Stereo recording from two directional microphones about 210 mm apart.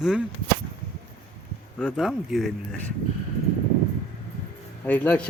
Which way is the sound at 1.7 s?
Centre (ahead or behind).